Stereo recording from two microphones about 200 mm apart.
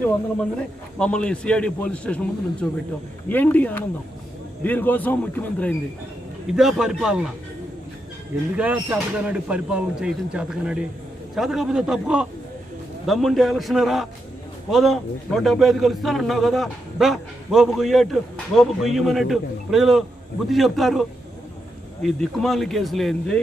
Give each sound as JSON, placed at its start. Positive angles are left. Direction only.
{"t": 0.0, "sound": "a man's voice", "side_deg": 5}
{"t": 8.5, "sound": "a man's voice", "side_deg": -10}
{"t": 22.0, "sound": "a man's voice", "side_deg": 0}